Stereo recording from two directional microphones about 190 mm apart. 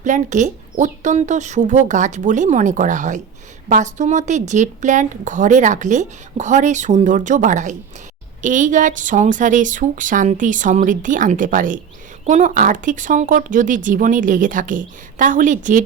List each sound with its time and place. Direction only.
0.0 s a woman's voice: 40° right (ahead or behind)